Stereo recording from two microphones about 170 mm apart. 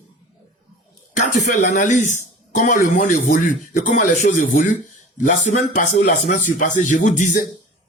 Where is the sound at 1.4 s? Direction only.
45° left (ahead or behind).